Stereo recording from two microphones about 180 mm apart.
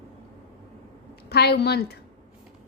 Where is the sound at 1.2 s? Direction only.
65° left (ahead or behind).